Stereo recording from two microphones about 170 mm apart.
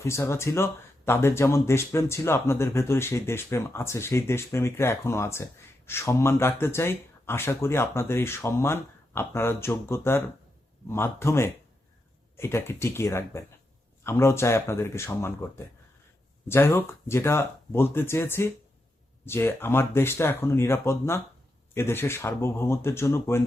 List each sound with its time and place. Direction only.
0.0 s speech: 15° left (ahead or behind)